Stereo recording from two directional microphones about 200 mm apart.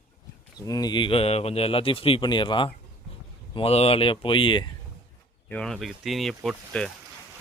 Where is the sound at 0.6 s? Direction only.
20° left (ahead or behind).